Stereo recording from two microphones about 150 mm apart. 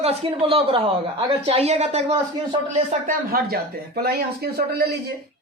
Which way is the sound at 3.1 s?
90° right.